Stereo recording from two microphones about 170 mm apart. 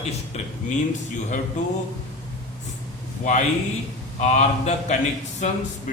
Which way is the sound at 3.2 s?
50° left (ahead or behind).